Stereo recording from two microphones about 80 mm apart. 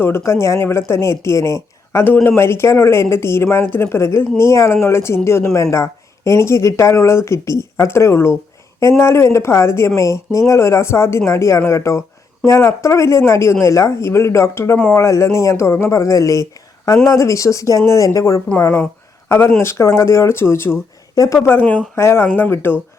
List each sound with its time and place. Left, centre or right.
0.2 s speech: left
19.5 s speech: left